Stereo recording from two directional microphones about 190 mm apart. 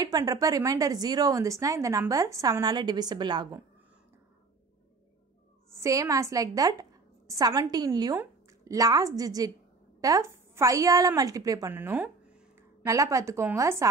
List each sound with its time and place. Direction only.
0.0 s a woman's voice: 20° right (ahead or behind)
5.8 s a woman's voice: 15° right (ahead or behind)